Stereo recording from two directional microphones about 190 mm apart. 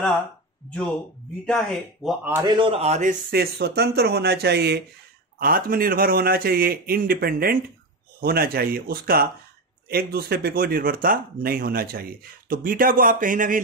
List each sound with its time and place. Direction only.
1.4 s speech: centre (ahead or behind)
2.4 s a man's voice: 25° right (ahead or behind)
3.3 s speech: 55° right (ahead or behind)
5.4 s speech: 50° right (ahead or behind)